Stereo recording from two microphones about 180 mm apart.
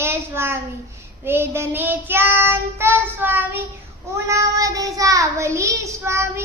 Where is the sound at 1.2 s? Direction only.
15° right (ahead or behind).